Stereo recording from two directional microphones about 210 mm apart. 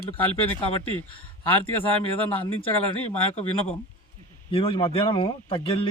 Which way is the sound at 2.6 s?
25° left (ahead or behind).